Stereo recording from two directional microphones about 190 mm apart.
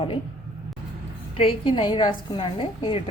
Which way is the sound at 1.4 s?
30° left (ahead or behind).